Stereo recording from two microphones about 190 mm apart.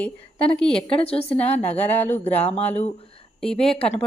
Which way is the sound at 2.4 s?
35° left (ahead or behind).